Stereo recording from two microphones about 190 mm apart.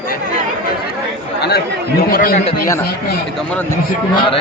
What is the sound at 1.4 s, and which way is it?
Speech, 60° left (ahead or behind).